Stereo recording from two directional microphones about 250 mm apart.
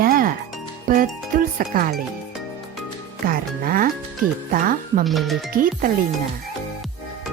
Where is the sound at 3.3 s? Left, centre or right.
Right.